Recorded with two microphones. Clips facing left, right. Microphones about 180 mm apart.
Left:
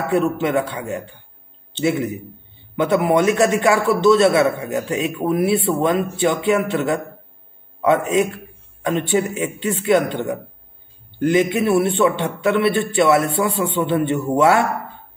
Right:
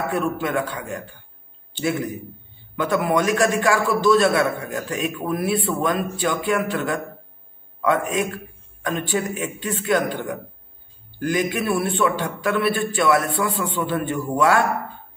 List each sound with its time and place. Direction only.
0.1 s a man's voice: 25° left (ahead or behind)